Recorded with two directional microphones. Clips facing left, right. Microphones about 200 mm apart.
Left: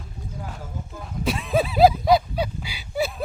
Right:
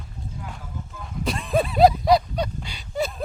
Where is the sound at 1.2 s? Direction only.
Centre (ahead or behind).